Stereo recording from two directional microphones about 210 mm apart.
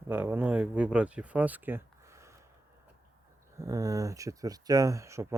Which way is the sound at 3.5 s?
15° right (ahead or behind).